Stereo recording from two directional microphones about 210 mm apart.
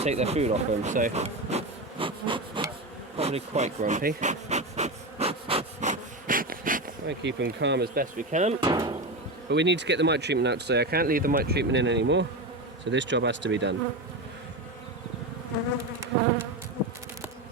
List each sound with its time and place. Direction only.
0.0 s speech: 30° right (ahead or behind)
3.2 s bee: 30° right (ahead or behind)
7.1 s speech: 55° right (ahead or behind)
8.3 s hammer: 35° right (ahead or behind)
8.6 s speech: 20° right (ahead or behind)
9.5 s speech: 55° right (ahead or behind)